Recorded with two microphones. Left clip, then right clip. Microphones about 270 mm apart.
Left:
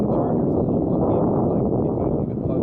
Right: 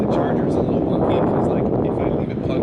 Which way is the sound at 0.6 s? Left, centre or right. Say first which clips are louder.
Right 2 dB; left.